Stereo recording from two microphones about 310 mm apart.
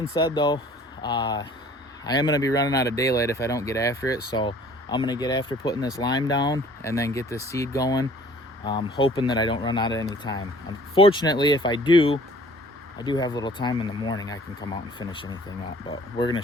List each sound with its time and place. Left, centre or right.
0.1 s speech: centre